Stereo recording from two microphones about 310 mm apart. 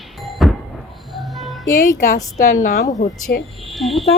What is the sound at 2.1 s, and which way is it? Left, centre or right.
Speech, left.